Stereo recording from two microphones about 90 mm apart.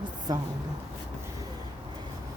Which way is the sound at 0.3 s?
45° right (ahead or behind).